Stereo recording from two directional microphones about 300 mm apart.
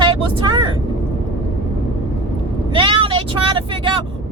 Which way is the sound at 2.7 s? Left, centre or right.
Centre.